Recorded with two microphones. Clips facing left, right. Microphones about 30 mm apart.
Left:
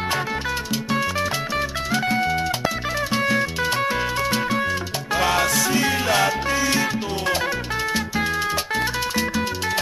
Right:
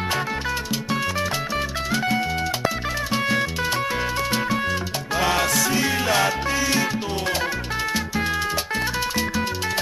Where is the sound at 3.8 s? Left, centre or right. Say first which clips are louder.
Left 2 dB; centre.